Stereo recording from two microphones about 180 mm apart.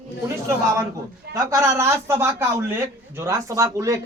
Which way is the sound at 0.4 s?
15° right (ahead or behind).